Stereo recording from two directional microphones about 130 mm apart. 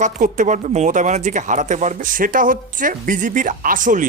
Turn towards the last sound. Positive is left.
turn(degrees=-90)